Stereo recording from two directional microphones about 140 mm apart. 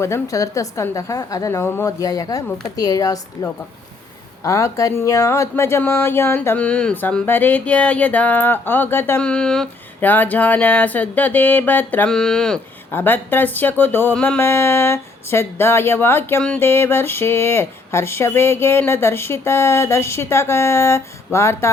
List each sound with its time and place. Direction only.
0.0 s a woman's voice: 20° left (ahead or behind); by 12.5 s 5° left (ahead or behind)
12.9 s a woman's voice: 15° left (ahead or behind)